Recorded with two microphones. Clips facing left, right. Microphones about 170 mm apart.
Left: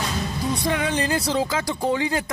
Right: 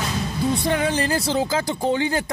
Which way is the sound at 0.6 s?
30° right (ahead or behind).